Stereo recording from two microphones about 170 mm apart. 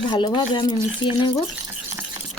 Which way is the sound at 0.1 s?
25° left (ahead or behind).